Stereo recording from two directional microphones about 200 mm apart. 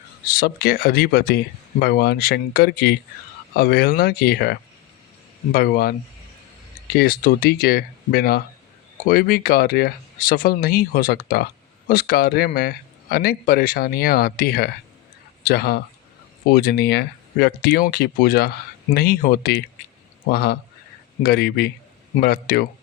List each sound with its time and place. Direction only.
0.3 s speech: 50° left (ahead or behind)
6.9 s speech: 50° left (ahead or behind)